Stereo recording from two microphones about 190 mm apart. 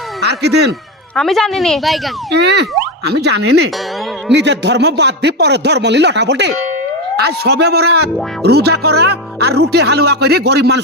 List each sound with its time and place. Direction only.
0.2 s speech: 60° right (ahead or behind)
1.1 s speech: centre (ahead or behind)
2.3 s speech: 60° right (ahead or behind)